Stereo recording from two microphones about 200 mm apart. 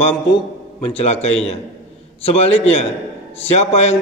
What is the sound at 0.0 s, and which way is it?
A man's voice, 25° left (ahead or behind).